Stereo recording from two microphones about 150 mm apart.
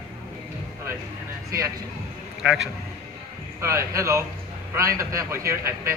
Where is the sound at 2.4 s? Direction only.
5° right (ahead or behind).